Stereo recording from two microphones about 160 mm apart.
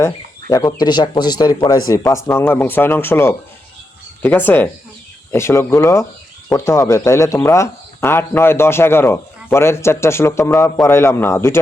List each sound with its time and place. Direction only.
0.0 s speech: 20° left (ahead or behind)